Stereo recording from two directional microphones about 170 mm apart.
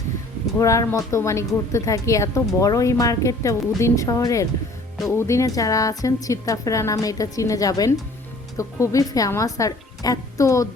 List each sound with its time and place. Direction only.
0.6 s a woman's voice: 20° left (ahead or behind)